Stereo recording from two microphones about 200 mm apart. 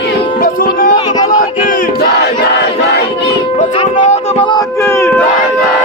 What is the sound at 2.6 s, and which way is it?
Battle cry, 55° left (ahead or behind).